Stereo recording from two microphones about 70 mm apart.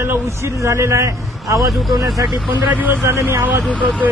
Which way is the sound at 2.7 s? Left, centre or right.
Right.